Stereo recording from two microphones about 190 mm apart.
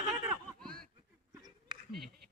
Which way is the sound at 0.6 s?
5° left (ahead or behind).